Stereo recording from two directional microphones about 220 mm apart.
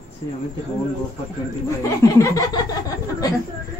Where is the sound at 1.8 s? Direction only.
15° left (ahead or behind).